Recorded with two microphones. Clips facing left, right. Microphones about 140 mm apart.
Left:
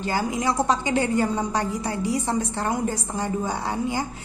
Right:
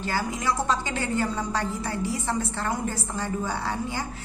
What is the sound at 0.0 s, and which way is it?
A woman's voice, 15° left (ahead or behind).